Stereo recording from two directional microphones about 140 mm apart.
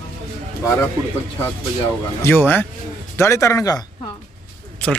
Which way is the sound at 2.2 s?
15° left (ahead or behind).